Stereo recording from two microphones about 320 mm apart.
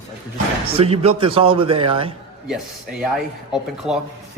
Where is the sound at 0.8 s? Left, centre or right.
Centre.